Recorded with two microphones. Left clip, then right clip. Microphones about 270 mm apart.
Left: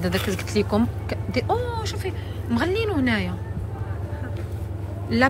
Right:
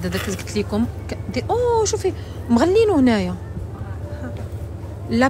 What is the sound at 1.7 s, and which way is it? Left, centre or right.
Speech, right.